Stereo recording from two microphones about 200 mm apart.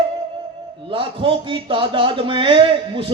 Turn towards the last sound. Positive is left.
turn(degrees=-25)  # may be behind; listen again after turning